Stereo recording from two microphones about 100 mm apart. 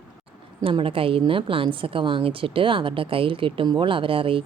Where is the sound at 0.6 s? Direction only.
65° right (ahead or behind).